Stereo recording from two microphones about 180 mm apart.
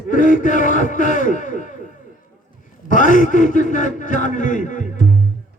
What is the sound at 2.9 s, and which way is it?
A man's voice, 45° left (ahead or behind).